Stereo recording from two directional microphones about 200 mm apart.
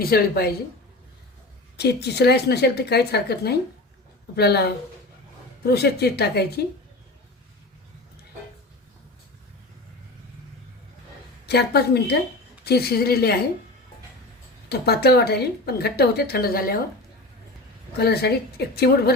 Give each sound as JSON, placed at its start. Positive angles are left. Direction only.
{"t": 0.0, "sound": "speech", "side_deg": 50}
{"t": 1.7, "sound": "a woman's voice", "side_deg": 55}
{"t": 11.4, "sound": "a woman's voice", "side_deg": 55}
{"t": 14.7, "sound": "speech", "side_deg": 55}
{"t": 17.9, "sound": "speech", "side_deg": 55}